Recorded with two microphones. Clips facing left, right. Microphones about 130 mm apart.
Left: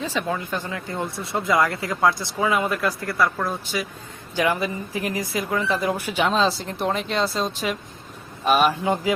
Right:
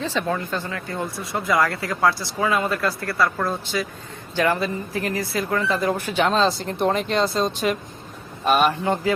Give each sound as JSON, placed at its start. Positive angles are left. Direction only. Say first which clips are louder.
{"t": 0.0, "sound": "speech", "louder": "right 2 dB", "side_deg": 10}